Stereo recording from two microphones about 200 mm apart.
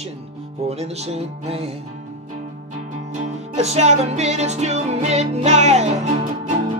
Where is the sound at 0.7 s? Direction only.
30° right (ahead or behind).